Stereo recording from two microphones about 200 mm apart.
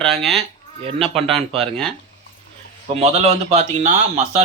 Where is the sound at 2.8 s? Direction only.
30° right (ahead or behind).